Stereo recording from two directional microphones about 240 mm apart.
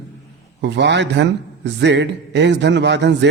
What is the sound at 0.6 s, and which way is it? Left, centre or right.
A man's voice, right.